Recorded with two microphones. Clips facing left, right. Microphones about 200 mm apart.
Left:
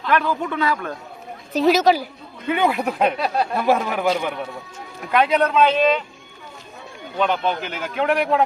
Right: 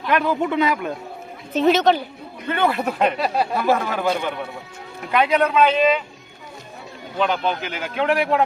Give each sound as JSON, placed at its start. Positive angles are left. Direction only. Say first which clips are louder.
{"t": 0.0, "sound": "a man's voice", "louder": "right 1 dB", "side_deg": -20}
{"t": 1.5, "sound": "a man's voice", "louder": "even", "side_deg": 0}
{"t": 3.0, "sound": "speech", "louder": "right 1 dB", "side_deg": 0}
{"t": 3.7, "sound": "a man's voice", "louder": "left 2 dB", "side_deg": 15}
{"t": 5.1, "sound": "speech", "louder": "even", "side_deg": -5}
{"t": 7.2, "sound": "speech", "louder": "even", "side_deg": -5}